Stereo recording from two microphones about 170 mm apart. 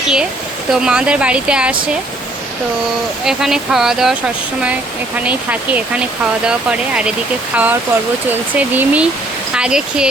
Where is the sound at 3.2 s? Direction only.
5° right (ahead or behind).